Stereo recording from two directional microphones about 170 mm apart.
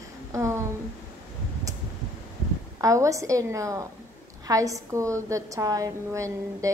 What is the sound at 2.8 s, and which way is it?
A woman's voice, 20° right (ahead or behind).